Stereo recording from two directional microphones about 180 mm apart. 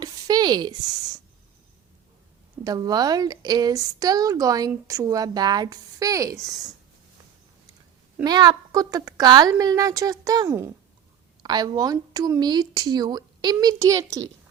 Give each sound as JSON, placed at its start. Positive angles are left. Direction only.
{"t": 0.0, "sound": "a sound", "side_deg": -20}
{"t": 2.6, "sound": "a woman's voice", "side_deg": -20}
{"t": 8.2, "sound": "a woman's voice", "side_deg": -20}